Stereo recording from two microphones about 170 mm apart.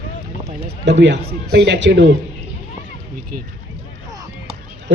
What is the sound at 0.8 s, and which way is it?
A man's voice, 90° right.